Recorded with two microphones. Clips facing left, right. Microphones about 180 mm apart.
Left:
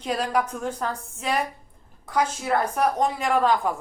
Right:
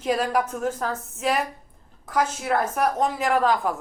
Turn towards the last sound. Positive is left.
turn(degrees=0)  # may be behind; listen again after turning